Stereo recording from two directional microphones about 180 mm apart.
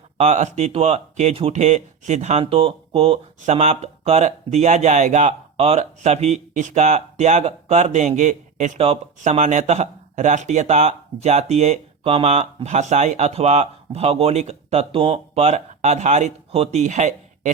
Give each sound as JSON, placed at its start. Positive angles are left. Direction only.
{"t": 0.2, "sound": "speech", "side_deg": -40}